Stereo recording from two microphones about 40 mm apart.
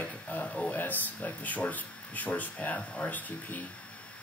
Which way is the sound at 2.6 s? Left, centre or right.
Left.